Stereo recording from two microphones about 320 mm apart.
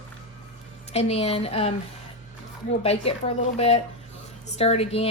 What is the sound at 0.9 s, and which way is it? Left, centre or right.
Speech, centre.